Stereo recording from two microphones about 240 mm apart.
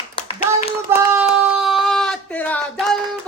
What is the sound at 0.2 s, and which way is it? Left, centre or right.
Clapping, left.